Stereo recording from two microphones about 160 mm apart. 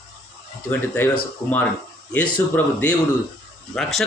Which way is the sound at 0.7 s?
15° left (ahead or behind).